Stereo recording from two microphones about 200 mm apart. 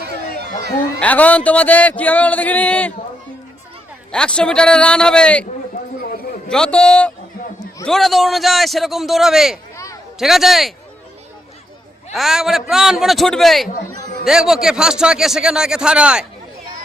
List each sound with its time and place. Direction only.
0.9 s speech: 5° left (ahead or behind)
4.1 s a man's voice: 5° left (ahead or behind)
6.5 s a man's voice: 5° left (ahead or behind)
9.7 s a sound: 15° left (ahead or behind)
10.2 s a man's voice: centre (ahead or behind)
12.1 s a man's voice: centre (ahead or behind)